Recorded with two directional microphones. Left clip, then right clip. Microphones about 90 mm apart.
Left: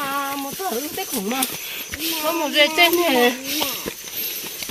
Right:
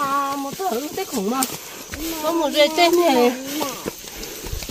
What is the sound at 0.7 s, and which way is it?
Speech, 20° right (ahead or behind).